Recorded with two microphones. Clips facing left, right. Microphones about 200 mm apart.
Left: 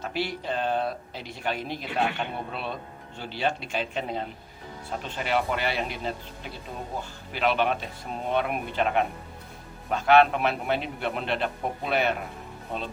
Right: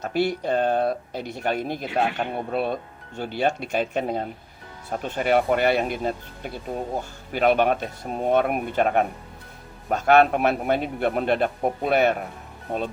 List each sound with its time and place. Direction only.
0.0 s speech: 45° right (ahead or behind)